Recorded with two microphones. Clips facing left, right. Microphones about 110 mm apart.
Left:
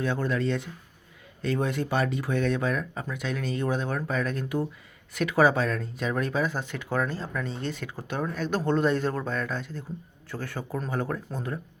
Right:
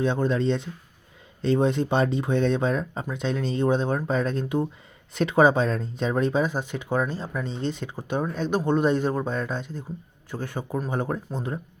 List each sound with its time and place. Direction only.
0.0 s speech: 20° right (ahead or behind)